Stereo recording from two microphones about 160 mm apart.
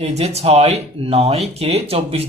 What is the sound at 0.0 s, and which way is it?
Speech, 40° right (ahead or behind).